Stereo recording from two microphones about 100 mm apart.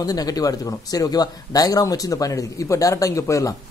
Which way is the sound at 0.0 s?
40° left (ahead or behind).